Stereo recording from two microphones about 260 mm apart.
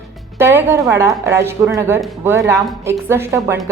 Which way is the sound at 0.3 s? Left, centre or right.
Centre.